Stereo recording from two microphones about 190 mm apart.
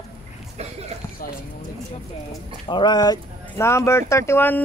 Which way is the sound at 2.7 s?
25° left (ahead or behind).